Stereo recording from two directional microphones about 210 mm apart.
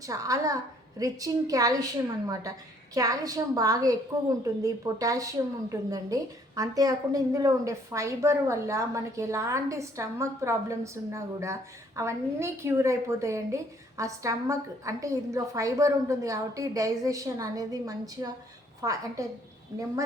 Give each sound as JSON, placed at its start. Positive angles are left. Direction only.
{"t": 0.0, "sound": "a woman's voice", "side_deg": -15}